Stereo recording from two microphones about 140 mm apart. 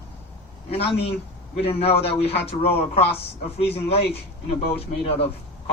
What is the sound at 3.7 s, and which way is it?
Speech, 45° left (ahead or behind).